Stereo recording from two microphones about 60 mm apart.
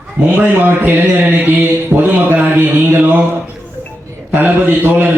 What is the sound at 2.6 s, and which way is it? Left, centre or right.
Music, right.